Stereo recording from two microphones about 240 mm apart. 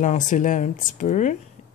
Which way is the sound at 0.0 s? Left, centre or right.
Left.